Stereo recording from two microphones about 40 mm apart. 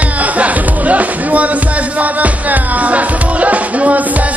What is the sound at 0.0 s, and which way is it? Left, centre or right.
Music, right.